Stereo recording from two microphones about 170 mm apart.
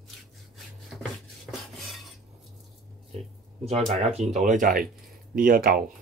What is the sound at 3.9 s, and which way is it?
Speech, 40° right (ahead or behind).